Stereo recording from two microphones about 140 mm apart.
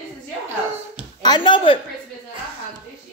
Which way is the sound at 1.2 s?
35° left (ahead or behind).